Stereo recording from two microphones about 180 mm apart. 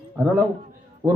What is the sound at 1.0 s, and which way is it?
Speech, 15° right (ahead or behind).